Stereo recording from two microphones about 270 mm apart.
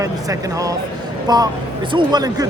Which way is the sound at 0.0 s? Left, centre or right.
Centre.